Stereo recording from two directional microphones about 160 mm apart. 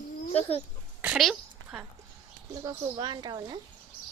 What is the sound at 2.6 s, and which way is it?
Speech, 30° right (ahead or behind).